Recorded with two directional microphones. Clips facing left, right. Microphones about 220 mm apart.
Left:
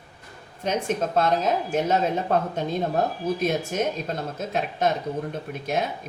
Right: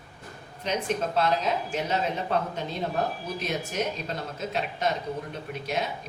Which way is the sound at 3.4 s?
50° left (ahead or behind).